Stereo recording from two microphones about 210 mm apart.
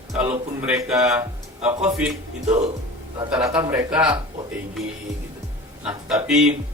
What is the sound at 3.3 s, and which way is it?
Speech, 20° right (ahead or behind).